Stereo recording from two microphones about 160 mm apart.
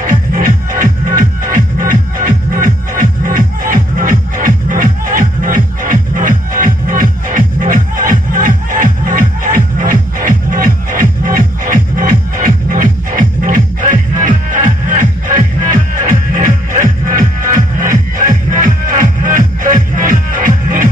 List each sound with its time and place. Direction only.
0.0 s music: 60° right (ahead or behind)